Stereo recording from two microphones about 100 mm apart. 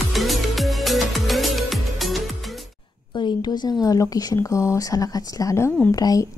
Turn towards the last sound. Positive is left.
turn(degrees=35)  # may be behind; listen again after turning